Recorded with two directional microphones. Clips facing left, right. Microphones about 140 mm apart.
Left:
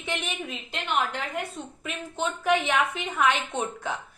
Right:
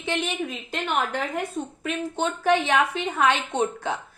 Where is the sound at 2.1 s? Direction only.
35° right (ahead or behind).